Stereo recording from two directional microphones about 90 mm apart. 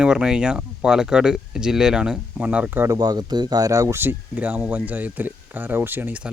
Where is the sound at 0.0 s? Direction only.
10° right (ahead or behind).